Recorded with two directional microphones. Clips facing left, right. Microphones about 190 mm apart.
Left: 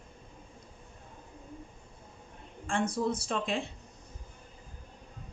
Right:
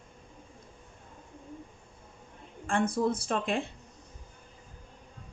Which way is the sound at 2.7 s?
55° right (ahead or behind).